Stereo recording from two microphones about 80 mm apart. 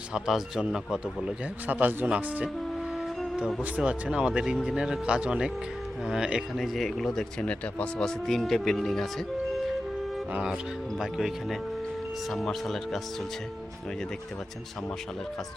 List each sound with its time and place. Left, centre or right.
0.1 s speech: centre
1.6 s a man's voice: right
2.9 s music: centre
3.6 s speech: centre
6.6 s speech: centre
10.5 s speech: centre